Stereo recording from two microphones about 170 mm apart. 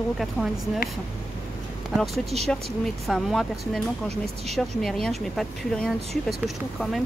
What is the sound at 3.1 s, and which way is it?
Speech, centre (ahead or behind).